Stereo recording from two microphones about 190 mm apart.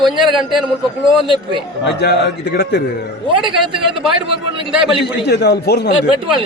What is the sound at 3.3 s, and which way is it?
A man's voice, 25° right (ahead or behind).